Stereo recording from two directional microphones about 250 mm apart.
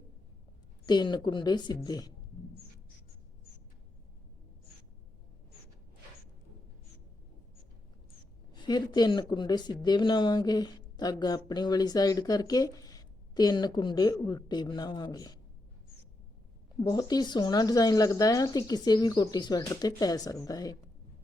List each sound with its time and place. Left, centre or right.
0.9 s speech: centre
8.5 s speech: centre
16.8 s speech: centre